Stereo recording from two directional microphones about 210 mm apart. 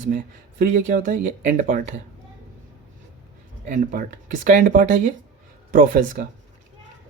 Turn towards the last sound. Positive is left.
turn(degrees=-40)  # may be behind; listen again after turning